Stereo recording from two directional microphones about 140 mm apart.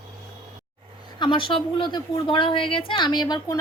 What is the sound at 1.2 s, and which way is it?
A woman's voice, 35° left (ahead or behind).